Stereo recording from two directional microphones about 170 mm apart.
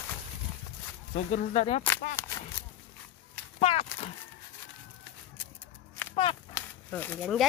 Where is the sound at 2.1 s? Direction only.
15° left (ahead or behind).